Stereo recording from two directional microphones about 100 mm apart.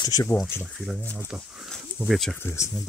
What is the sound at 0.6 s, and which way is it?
Speech, centre (ahead or behind).